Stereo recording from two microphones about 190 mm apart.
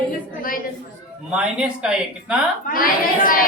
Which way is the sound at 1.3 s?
5° right (ahead or behind).